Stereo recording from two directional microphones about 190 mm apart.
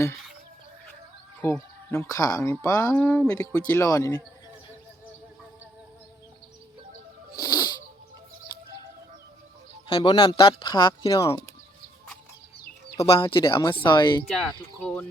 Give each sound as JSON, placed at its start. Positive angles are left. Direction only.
{"t": 1.4, "sound": "speech", "side_deg": 10}
{"t": 7.4, "sound": "wheeze", "side_deg": 20}
{"t": 9.8, "sound": "speech", "side_deg": 25}
{"t": 13.1, "sound": "speech", "side_deg": 25}
{"t": 14.3, "sound": "speech", "side_deg": 5}